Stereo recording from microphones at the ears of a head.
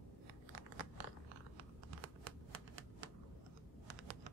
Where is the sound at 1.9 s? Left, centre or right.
Right.